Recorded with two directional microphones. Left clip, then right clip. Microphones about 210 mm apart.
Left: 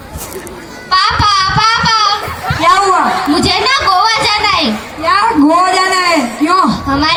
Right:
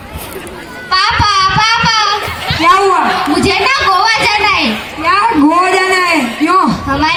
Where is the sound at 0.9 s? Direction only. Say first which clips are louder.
Even; 30° left (ahead or behind).